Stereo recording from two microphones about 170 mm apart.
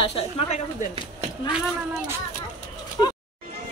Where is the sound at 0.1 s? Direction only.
35° left (ahead or behind).